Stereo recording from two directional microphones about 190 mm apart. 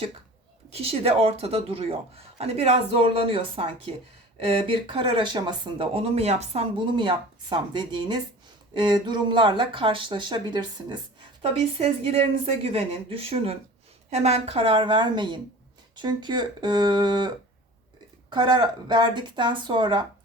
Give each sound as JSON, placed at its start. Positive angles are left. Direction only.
{"t": 0.7, "sound": "speech", "side_deg": -30}